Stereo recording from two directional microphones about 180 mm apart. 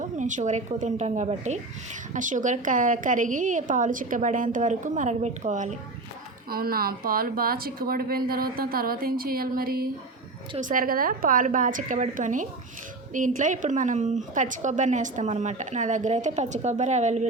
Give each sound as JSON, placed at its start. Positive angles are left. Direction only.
{"t": 0.0, "sound": "a woman's voice", "side_deg": -45}
{"t": 6.5, "sound": "a woman's voice", "side_deg": -55}